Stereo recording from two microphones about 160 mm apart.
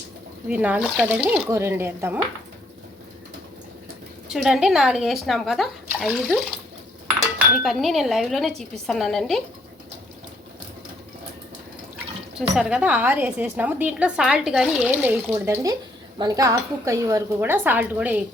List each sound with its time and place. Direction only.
0.4 s a woman's voice: 10° right (ahead or behind)
4.3 s a woman's voice: centre (ahead or behind)
7.6 s a woman's voice: centre (ahead or behind)
12.4 s a woman's voice: 5° right (ahead or behind)
16.1 s a woman's voice: 25° right (ahead or behind)